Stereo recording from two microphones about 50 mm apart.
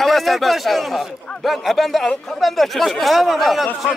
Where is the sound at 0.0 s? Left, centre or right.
Centre.